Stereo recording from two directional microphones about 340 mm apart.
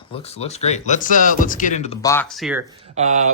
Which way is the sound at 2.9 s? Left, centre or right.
Centre.